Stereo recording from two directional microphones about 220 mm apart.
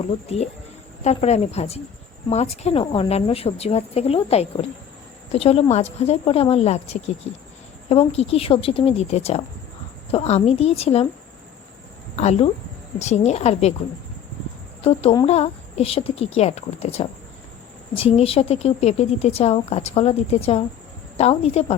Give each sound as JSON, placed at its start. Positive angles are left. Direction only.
{"t": 0.0, "sound": "a woman's voice", "side_deg": 30}
{"t": 12.1, "sound": "a woman's voice", "side_deg": 30}
{"t": 14.8, "sound": "a woman's voice", "side_deg": 30}